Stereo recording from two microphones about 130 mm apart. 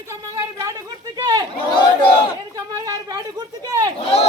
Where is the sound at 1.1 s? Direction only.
30° right (ahead or behind).